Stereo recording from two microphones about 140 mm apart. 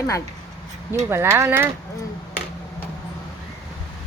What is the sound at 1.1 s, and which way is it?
Speech, 15° right (ahead or behind).